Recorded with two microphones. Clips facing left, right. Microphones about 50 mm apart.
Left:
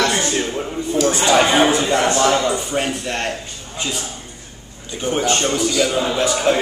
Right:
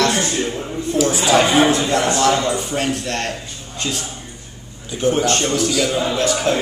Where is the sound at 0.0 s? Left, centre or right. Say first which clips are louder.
Right 1 dB; centre.